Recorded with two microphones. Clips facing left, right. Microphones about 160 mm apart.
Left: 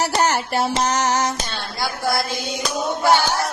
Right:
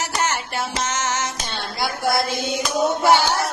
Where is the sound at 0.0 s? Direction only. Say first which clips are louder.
Left 5 dB; 35° left (ahead or behind).